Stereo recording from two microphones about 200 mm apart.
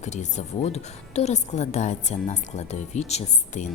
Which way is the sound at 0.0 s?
35° left (ahead or behind).